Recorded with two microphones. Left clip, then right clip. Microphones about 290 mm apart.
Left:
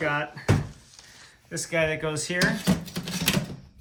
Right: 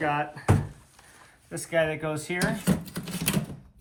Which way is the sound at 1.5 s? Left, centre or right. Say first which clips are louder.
Even; centre.